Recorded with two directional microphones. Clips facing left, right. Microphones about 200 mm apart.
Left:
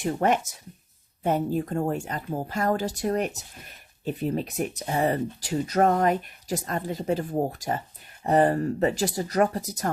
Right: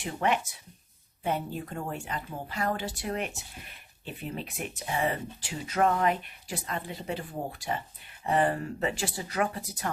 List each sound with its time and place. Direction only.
0.0 s speech: 45° left (ahead or behind)